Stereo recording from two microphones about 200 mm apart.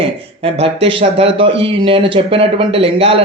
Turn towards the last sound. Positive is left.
turn(degrees=-30)  # may be behind; listen again after turning